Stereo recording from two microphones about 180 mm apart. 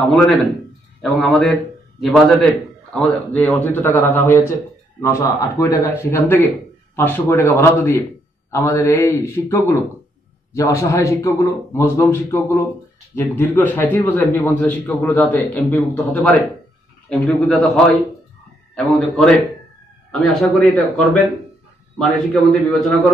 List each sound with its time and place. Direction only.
0.1 s a man's voice: centre (ahead or behind)
18.8 s a man's voice: 5° left (ahead or behind)